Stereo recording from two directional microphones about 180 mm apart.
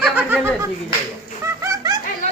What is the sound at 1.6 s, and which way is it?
Snicker, 15° right (ahead or behind).